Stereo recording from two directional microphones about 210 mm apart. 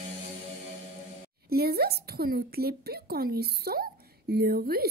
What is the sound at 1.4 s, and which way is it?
Speech, 45° right (ahead or behind).